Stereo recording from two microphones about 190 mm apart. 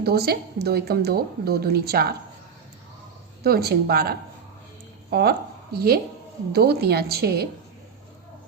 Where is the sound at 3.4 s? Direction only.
55° right (ahead or behind).